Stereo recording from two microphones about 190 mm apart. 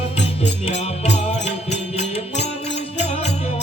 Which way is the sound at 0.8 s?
35° left (ahead or behind).